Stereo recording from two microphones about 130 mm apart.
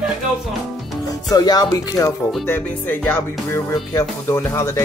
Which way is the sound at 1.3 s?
30° left (ahead or behind).